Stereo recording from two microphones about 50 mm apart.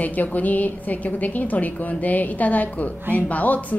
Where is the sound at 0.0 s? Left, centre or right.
Left.